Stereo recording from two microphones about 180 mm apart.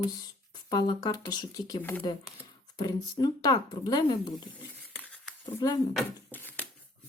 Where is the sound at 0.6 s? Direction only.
20° left (ahead or behind).